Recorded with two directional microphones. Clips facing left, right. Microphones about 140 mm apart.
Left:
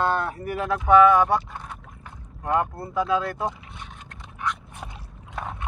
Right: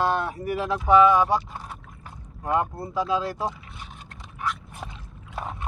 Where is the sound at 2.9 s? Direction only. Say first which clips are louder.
Left 2 dB; 30° right (ahead or behind).